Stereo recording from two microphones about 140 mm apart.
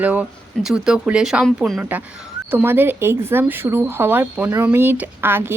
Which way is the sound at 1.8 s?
10° right (ahead or behind).